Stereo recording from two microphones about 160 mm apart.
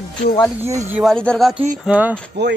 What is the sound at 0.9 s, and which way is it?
Speech, centre (ahead or behind).